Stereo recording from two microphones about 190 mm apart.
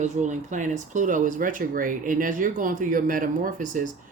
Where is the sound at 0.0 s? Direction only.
40° right (ahead or behind).